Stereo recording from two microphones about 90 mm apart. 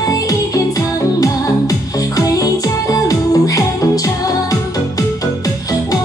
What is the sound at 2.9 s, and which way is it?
Music, 40° left (ahead or behind).